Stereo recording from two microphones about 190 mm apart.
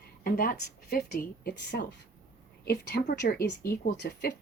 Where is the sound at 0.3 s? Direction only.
50° left (ahead or behind).